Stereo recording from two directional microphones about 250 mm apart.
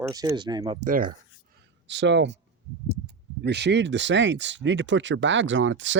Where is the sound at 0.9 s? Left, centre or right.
Right.